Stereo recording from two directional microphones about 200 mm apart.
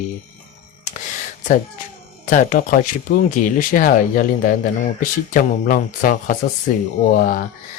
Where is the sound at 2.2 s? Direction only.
40° left (ahead or behind).